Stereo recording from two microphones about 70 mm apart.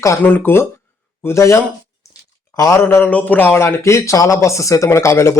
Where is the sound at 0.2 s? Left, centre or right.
Left.